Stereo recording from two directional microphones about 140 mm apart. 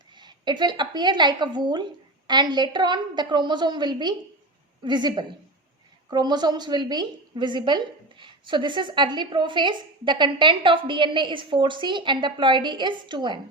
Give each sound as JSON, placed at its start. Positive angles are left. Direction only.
{"t": 0.1, "sound": "a woman's voice", "side_deg": -30}